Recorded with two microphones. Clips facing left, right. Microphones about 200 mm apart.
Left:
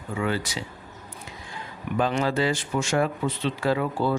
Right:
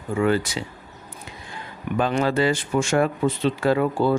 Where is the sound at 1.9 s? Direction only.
60° right (ahead or behind).